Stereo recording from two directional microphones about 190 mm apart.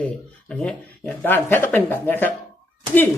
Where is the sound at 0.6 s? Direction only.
5° left (ahead or behind).